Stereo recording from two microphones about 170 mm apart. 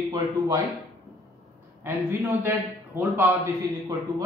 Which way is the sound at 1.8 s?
15° right (ahead or behind).